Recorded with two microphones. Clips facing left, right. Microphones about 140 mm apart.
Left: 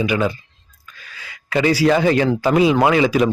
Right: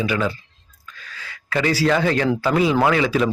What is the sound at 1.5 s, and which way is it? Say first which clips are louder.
Speech: left 4 dB; 15° left (ahead or behind).